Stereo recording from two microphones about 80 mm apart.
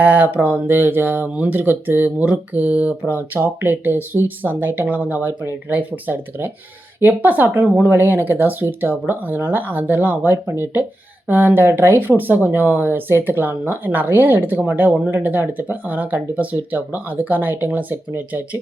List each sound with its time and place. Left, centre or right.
0.0 s speech: right
10.4 s speech: right
11.3 s speech: right